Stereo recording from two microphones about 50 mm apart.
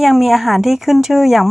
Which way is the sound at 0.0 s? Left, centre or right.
Centre.